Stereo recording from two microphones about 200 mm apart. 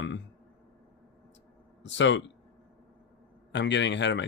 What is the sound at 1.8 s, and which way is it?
Speech, 65° left (ahead or behind).